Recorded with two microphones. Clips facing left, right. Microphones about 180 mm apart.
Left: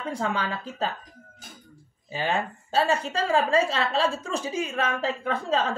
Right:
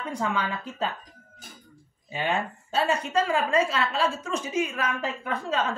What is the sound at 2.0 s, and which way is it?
A woman's voice, 35° left (ahead or behind).